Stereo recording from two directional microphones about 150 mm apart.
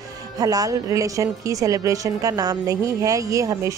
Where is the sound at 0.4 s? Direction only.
25° right (ahead or behind).